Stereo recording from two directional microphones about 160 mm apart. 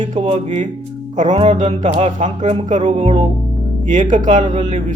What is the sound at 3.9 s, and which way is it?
Speech, 50° right (ahead or behind).